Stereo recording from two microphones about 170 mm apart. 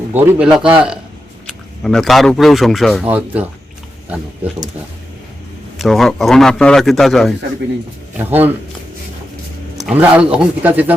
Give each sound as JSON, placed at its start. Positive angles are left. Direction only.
{"t": 0.1, "sound": "speech", "side_deg": -10}
{"t": 5.8, "sound": "a man's voice", "side_deg": 0}
{"t": 8.2, "sound": "speech", "side_deg": -10}
{"t": 9.7, "sound": "speech", "side_deg": -5}